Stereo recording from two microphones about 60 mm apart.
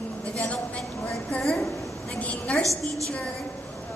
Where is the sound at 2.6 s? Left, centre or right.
Right.